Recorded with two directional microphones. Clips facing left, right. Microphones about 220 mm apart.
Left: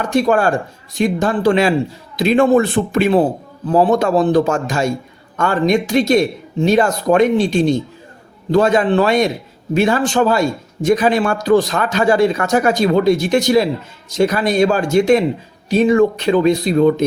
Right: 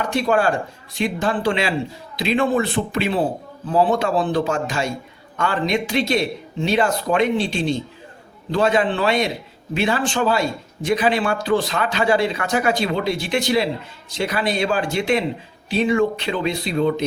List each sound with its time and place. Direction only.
0.0 s a man's voice: 45° left (ahead or behind)